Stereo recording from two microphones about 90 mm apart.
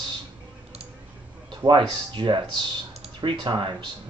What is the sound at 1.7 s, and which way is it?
Speech, 65° right (ahead or behind).